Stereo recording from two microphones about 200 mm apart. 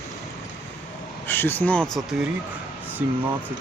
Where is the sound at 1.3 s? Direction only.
10° left (ahead or behind); by 3.2 s 10° right (ahead or behind).